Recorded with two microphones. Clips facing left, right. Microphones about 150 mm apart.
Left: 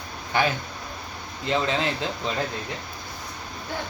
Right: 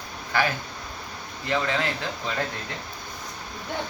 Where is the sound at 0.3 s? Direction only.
20° left (ahead or behind).